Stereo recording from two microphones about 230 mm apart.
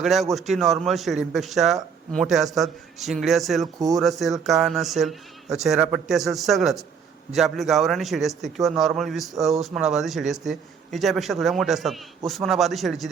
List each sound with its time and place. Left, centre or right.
0.0 s a man's voice: centre